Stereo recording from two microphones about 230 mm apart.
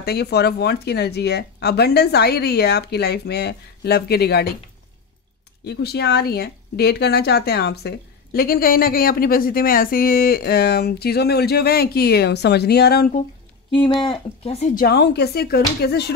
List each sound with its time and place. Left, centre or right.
0.0 s a woman's voice: left
5.7 s a woman's voice: left
13.7 s speech: left
14.8 s a woman's voice: left